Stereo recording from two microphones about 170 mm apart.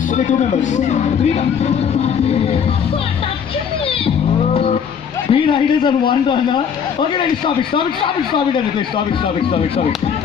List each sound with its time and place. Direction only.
0.7 s a man's voice: 40° left (ahead or behind)
5.3 s a man's voice: 30° left (ahead or behind)